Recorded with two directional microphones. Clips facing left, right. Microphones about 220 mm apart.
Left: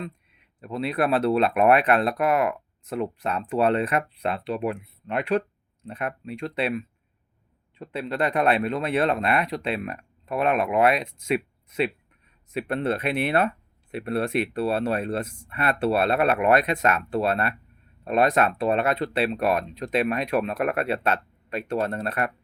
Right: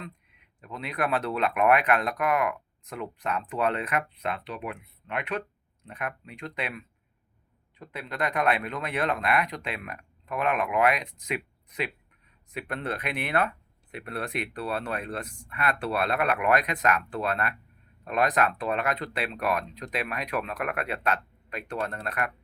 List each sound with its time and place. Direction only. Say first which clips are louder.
0.6 s speech: left 6 dB; 30° left (ahead or behind)
12.5 s speech: left 7 dB; 25° left (ahead or behind)